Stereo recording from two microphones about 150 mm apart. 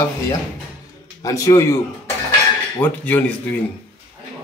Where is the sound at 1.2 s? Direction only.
20° left (ahead or behind).